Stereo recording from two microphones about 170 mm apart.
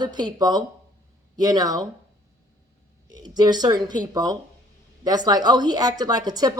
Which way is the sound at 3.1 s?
25° right (ahead or behind).